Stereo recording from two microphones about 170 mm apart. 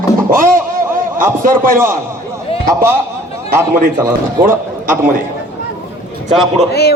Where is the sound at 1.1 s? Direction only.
55° right (ahead or behind).